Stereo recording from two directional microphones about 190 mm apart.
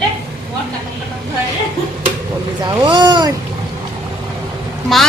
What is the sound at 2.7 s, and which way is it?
Speech, 25° right (ahead or behind).